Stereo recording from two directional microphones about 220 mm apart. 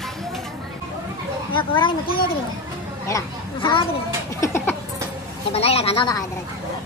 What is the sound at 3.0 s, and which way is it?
Speech, 20° left (ahead or behind).